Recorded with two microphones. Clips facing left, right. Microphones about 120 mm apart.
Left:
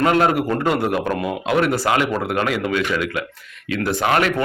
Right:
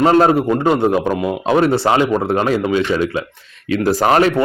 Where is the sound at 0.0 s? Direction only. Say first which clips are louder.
Right 5 dB; 30° right (ahead or behind).